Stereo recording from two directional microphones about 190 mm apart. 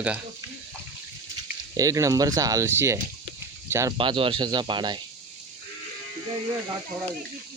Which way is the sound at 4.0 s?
25° right (ahead or behind).